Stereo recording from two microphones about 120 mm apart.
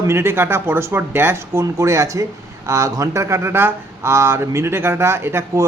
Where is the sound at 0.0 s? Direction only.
20° right (ahead or behind).